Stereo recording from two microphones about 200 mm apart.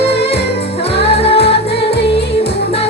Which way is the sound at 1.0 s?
30° left (ahead or behind).